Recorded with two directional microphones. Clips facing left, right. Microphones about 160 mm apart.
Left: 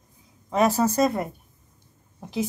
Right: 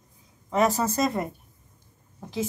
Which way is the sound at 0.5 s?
10° left (ahead or behind).